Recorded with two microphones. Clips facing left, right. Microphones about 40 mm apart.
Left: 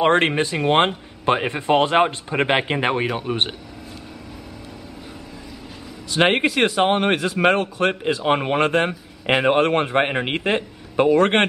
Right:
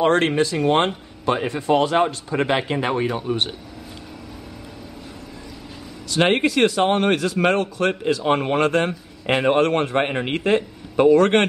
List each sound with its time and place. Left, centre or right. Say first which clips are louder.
0.0 s speech: even; left
6.1 s speech: even; centre